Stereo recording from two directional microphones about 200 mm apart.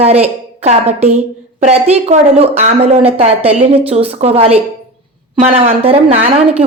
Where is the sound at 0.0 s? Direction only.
30° right (ahead or behind).